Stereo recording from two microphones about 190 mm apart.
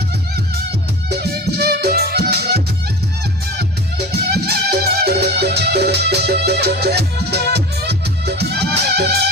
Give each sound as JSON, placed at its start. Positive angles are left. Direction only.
{"t": 1.1, "sound": "music", "side_deg": -55}
{"t": 4.4, "sound": "music", "side_deg": -55}